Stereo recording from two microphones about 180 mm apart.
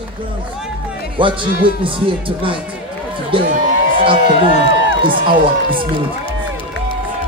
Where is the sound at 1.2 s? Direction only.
30° right (ahead or behind).